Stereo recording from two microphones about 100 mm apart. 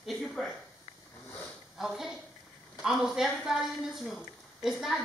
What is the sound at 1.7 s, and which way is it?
Speech, 5° right (ahead or behind).